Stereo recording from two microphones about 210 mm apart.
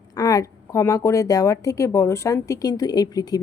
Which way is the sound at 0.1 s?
15° left (ahead or behind).